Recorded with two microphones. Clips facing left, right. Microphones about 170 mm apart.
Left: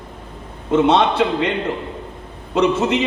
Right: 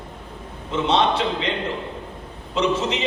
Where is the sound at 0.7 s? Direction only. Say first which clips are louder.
Left 5 dB; 55° left (ahead or behind).